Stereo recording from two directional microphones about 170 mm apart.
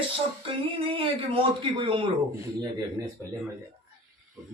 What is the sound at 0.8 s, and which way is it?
Speech, 30° right (ahead or behind).